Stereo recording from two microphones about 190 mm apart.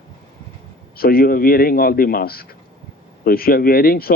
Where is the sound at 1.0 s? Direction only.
50° left (ahead or behind).